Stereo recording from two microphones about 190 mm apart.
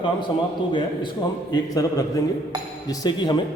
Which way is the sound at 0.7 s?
25° left (ahead or behind).